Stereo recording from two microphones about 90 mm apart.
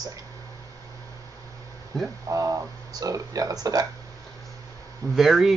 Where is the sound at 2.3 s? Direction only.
40° right (ahead or behind).